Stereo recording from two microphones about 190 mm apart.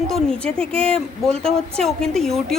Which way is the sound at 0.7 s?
30° right (ahead or behind).